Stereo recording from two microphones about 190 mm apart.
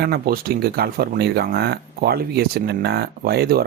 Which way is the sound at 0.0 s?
55° right (ahead or behind).